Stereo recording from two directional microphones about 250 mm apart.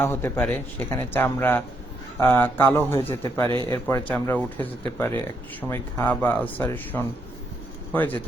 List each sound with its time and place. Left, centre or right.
0.0 s speech: centre